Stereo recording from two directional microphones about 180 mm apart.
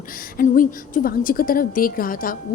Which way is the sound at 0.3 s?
50° left (ahead or behind).